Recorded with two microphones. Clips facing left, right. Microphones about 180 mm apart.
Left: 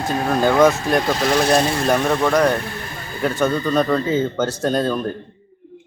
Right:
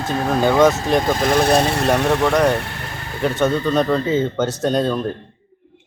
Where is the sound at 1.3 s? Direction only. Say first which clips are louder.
Right 1 dB; centre (ahead or behind).